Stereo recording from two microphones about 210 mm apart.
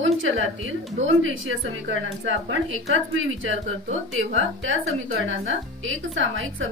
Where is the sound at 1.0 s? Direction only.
70° right (ahead or behind).